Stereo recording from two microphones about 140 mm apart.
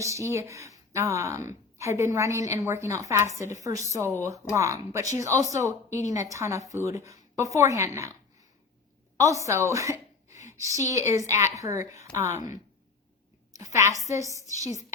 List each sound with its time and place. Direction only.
0.0 s a woman's voice: 20° right (ahead or behind)
9.1 s a woman's voice: 20° right (ahead or behind)
13.6 s a woman's voice: 25° right (ahead or behind)